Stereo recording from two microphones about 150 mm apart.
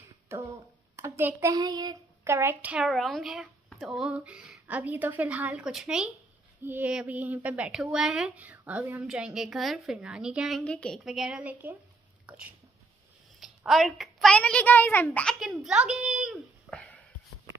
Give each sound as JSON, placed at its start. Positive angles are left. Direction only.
{"t": 0.3, "sound": "finger snapping", "side_deg": -15}
{"t": 0.9, "sound": "a woman's voice", "side_deg": -15}
{"t": 10.6, "sound": "a woman's voice", "side_deg": 5}
{"t": 11.1, "sound": "a woman's voice", "side_deg": -5}
{"t": 15.3, "sound": "a woman's voice", "side_deg": 0}
{"t": 16.7, "sound": "a sound", "side_deg": 10}